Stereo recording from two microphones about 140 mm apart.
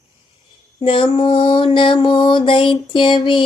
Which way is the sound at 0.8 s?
40° left (ahead or behind).